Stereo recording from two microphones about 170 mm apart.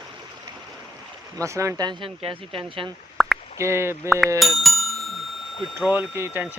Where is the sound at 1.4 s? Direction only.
15° right (ahead or behind).